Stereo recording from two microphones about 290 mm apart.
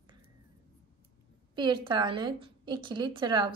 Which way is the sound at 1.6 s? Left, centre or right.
Centre.